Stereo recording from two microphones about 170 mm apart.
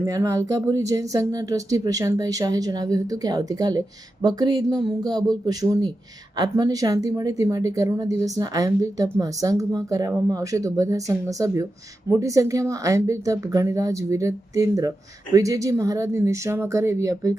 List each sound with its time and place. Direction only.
0.0 s a woman's voice: 20° right (ahead or behind)